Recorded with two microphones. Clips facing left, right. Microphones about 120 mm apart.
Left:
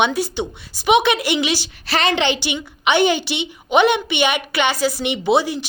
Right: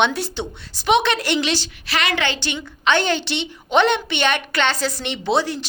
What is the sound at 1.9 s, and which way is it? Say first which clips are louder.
Speech: left 4 dB; 35° left (ahead or behind).